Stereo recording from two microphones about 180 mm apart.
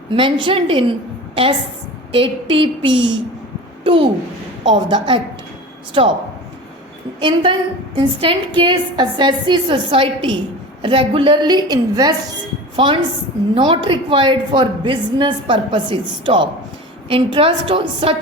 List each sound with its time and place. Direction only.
0.1 s a woman's voice: 25° right (ahead or behind)
2.1 s a woman's voice: 30° right (ahead or behind)
7.2 s a woman's voice: 30° right (ahead or behind)